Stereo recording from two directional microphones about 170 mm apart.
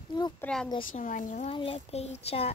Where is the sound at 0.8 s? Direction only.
50° left (ahead or behind).